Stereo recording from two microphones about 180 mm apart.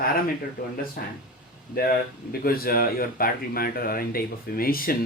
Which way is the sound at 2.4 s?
55° left (ahead or behind).